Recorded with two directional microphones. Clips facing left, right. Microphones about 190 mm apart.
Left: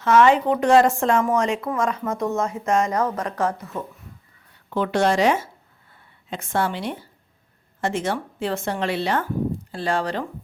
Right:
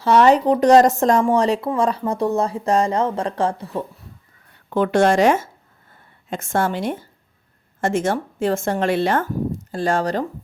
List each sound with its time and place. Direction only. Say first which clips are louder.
0.0 s a woman's voice: right 2 dB; 35° right (ahead or behind)
4.7 s speech: right 4 dB; 50° right (ahead or behind)